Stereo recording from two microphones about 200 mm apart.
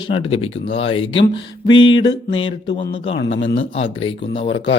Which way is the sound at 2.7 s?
40° left (ahead or behind).